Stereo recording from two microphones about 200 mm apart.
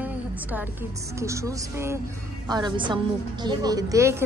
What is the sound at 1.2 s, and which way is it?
A woman's voice, 15° right (ahead or behind).